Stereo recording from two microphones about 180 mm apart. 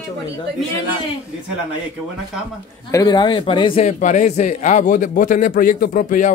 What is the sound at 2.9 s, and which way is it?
Speech, 20° left (ahead or behind).